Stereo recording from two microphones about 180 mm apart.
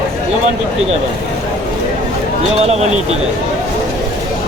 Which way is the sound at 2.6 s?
35° right (ahead or behind).